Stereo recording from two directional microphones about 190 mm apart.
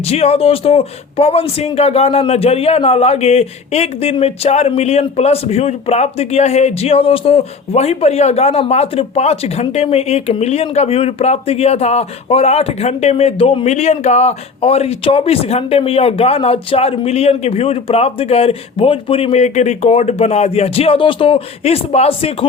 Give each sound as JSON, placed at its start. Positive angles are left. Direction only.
{"t": 0.1, "sound": "speech", "side_deg": 30}